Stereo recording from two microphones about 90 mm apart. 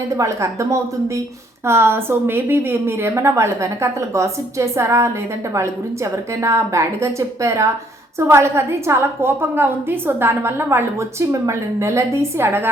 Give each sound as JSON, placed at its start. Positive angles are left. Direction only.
{"t": 0.2, "sound": "a woman's voice", "side_deg": -35}
{"t": 6.4, "sound": "a woman's voice", "side_deg": -30}